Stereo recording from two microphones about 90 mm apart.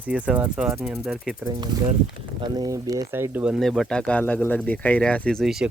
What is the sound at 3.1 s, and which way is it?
Speech, 25° right (ahead or behind).